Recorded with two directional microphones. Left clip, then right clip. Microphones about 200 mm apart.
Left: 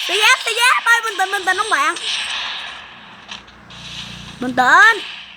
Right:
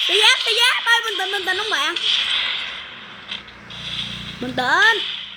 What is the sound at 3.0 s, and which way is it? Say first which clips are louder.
Mechanisms: right 2 dB; centre (ahead or behind).